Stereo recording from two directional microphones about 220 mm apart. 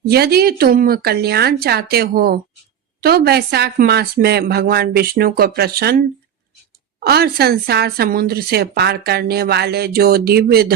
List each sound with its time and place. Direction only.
0.0 s a woman's voice: 45° right (ahead or behind)
7.0 s a woman's voice: 45° right (ahead or behind)